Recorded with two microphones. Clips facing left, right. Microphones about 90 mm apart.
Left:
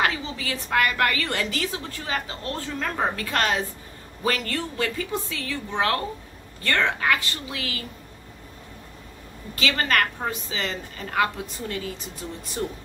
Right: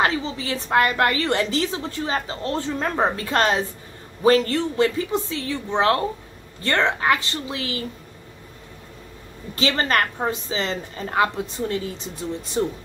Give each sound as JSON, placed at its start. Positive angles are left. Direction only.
{"t": 0.0, "sound": "a woman's voice", "side_deg": -30}
{"t": 9.6, "sound": "a woman's voice", "side_deg": -30}